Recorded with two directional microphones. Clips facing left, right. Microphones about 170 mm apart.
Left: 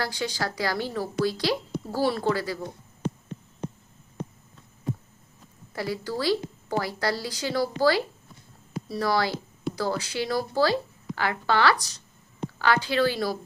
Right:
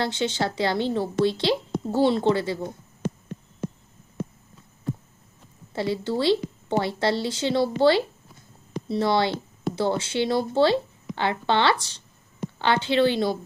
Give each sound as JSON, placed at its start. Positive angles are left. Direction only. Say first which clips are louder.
{"t": 0.0, "sound": "a woman's voice", "louder": "right 4 dB", "side_deg": -25}
{"t": 5.7, "sound": "a woman's voice", "louder": "right 4 dB", "side_deg": -25}